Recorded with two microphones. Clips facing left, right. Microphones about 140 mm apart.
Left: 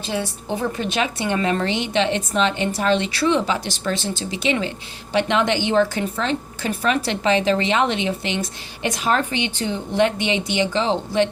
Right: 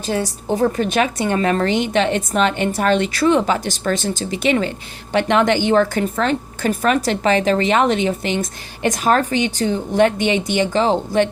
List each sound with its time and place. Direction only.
0.0 s a woman's voice: 40° right (ahead or behind)